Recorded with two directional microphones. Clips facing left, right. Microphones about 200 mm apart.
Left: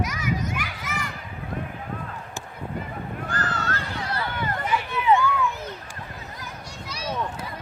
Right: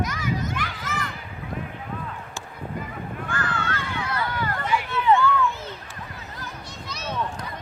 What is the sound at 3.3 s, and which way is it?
Run, 40° left (ahead or behind).